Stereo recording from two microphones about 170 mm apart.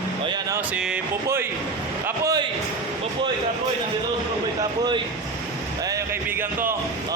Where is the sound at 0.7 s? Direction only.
5° right (ahead or behind).